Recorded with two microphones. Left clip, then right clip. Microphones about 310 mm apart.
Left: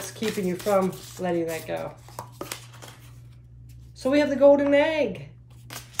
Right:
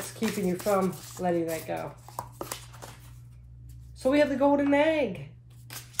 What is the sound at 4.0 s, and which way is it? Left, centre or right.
Speech, centre.